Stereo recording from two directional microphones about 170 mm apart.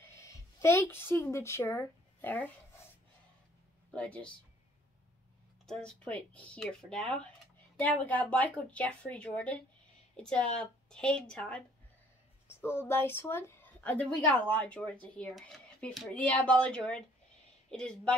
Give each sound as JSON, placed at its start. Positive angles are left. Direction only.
{"t": 0.1, "sound": "speech", "side_deg": 15}
{"t": 3.9, "sound": "speech", "side_deg": 5}
{"t": 5.7, "sound": "speech", "side_deg": 5}
{"t": 12.6, "sound": "speech", "side_deg": 15}